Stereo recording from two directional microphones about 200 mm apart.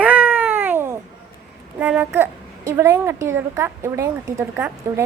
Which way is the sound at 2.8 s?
15° right (ahead or behind).